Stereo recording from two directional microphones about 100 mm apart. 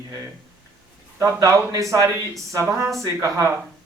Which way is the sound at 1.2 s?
30° right (ahead or behind).